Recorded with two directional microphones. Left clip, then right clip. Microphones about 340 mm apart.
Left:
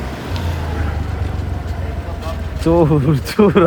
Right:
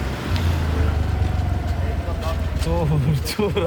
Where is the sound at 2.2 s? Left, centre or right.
Centre.